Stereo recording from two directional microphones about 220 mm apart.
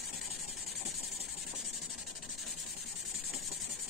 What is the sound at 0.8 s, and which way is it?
Engine, centre (ahead or behind).